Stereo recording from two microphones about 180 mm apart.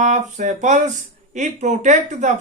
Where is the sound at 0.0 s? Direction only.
45° right (ahead or behind).